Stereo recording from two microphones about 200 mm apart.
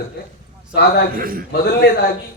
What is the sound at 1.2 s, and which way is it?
Speech, 45° right (ahead or behind).